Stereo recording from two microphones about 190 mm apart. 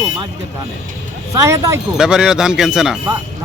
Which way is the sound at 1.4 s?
15° right (ahead or behind).